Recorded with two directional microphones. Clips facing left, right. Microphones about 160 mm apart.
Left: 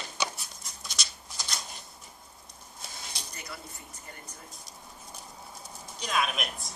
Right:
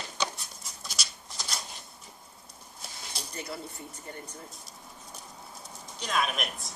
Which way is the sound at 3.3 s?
30° right (ahead or behind).